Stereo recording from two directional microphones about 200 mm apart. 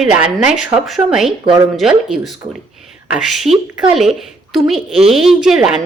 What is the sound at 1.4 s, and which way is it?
Speech, 25° right (ahead or behind).